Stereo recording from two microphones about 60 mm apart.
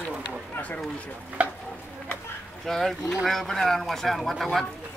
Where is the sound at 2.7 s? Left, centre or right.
Centre.